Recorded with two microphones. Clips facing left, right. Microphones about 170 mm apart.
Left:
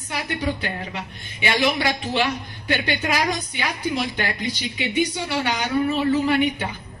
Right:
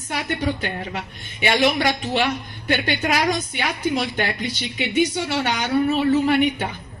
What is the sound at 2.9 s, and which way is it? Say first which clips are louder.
A woman's voice: right 2 dB; 50° right (ahead or behind).